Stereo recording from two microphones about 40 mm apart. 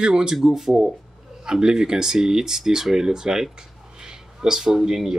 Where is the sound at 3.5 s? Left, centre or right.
Centre.